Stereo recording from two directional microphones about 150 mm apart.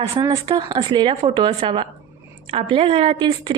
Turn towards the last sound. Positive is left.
turn(degrees=-30)  # may be behind; listen again after turning